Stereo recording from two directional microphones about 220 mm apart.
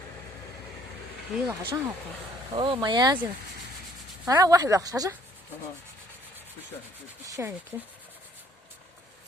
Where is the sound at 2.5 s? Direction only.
20° right (ahead or behind).